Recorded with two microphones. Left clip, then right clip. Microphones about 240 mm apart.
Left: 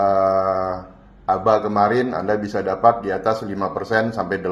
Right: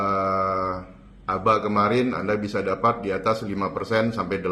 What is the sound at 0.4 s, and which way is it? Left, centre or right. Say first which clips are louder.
Mantra: left 4 dB; left.